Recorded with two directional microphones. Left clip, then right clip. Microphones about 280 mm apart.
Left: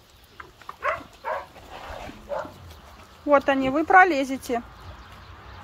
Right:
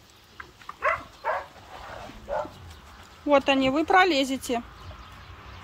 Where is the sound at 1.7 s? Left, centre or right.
Left.